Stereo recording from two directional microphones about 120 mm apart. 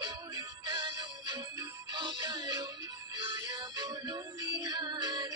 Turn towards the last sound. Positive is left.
turn(degrees=-35)  # may be behind; listen again after turning